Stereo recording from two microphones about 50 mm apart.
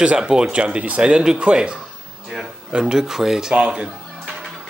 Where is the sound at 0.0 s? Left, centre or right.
Centre.